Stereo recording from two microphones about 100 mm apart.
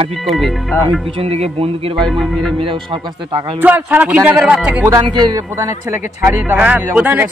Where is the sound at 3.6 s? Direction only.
15° right (ahead or behind).